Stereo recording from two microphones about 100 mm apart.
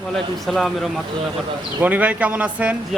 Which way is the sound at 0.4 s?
Centre (ahead or behind).